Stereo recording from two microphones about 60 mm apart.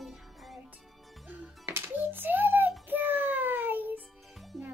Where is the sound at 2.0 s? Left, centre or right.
Right.